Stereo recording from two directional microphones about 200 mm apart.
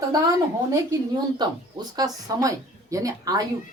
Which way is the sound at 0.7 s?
20° right (ahead or behind).